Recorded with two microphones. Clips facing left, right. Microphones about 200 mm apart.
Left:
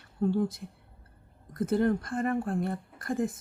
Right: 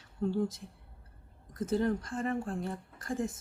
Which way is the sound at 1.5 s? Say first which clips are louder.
Left 4 dB; 55° left (ahead or behind).